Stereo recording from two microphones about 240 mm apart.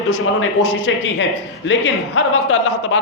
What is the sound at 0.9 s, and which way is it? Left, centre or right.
A man's voice, left.